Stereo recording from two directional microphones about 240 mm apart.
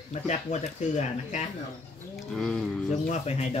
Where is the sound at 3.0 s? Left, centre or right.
Left.